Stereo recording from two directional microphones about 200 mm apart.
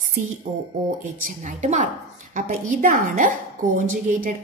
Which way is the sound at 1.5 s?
35° right (ahead or behind).